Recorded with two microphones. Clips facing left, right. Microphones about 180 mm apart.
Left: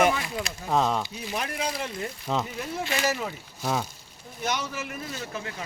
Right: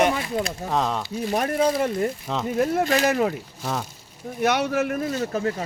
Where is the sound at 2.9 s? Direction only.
60° right (ahead or behind).